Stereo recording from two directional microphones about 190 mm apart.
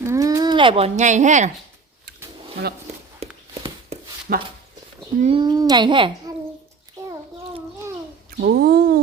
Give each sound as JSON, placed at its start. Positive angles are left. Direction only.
{"t": 0.0, "sound": "speech", "side_deg": -15}
{"t": 3.2, "sound": "walk", "side_deg": -30}
{"t": 4.3, "sound": "speech", "side_deg": -55}
{"t": 5.2, "sound": "a child's voice", "side_deg": -25}
{"t": 7.1, "sound": "a sound", "side_deg": -20}
{"t": 8.4, "sound": "speech", "side_deg": -55}